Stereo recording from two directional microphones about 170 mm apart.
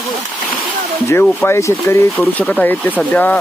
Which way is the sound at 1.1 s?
15° left (ahead or behind).